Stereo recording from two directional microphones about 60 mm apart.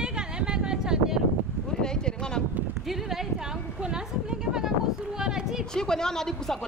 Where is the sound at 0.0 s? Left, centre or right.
Centre.